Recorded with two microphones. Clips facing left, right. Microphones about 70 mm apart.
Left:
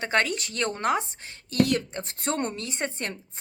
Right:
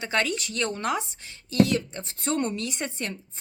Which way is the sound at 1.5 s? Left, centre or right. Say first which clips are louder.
Right 1 dB; left.